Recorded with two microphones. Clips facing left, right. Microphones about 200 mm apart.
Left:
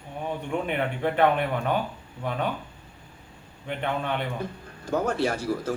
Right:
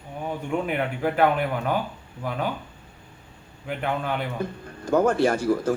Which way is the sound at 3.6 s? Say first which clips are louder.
Right 1 dB; 5° right (ahead or behind).